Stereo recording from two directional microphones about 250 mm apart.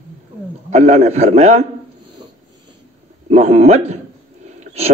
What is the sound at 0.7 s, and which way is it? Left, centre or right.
Speech, right.